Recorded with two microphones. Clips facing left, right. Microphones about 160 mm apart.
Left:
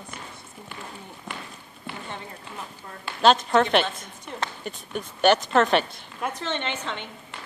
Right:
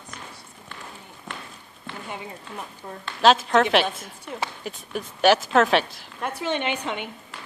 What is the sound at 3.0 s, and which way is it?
Speech, centre (ahead or behind).